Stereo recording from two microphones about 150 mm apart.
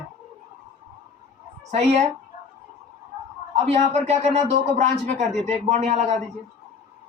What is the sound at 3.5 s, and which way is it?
A man's voice, 45° right (ahead or behind).